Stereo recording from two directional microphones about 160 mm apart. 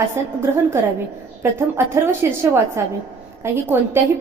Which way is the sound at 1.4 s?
15° right (ahead or behind).